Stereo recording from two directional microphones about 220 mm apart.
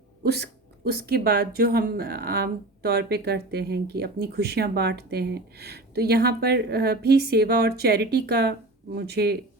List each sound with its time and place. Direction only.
0.2 s speech: 50° right (ahead or behind)